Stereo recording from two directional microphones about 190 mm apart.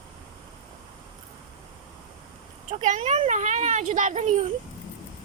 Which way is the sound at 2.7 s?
40° right (ahead or behind).